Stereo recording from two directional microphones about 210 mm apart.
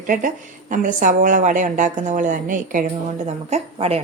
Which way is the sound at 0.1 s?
40° right (ahead or behind).